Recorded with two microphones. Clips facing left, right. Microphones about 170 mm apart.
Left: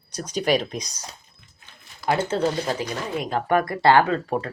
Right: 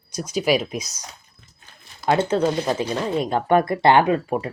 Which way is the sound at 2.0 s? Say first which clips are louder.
Right 3 dB; 20° right (ahead or behind).